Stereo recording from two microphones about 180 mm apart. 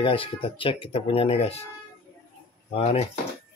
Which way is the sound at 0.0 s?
30° left (ahead or behind).